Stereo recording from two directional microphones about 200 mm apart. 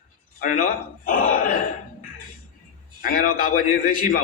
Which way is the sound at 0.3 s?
40° left (ahead or behind).